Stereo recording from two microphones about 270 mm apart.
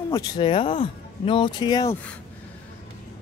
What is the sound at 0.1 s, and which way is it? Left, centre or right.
Speech, centre.